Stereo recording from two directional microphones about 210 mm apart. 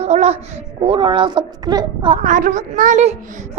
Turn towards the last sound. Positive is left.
turn(degrees=-35)  # may be behind; listen again after turning